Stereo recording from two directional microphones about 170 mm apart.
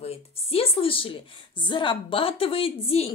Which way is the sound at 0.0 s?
35° left (ahead or behind).